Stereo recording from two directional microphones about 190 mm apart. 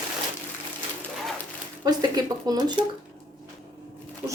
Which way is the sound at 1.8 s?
20° right (ahead or behind).